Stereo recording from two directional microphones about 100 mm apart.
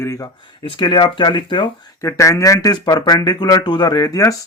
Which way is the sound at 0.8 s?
50° left (ahead or behind).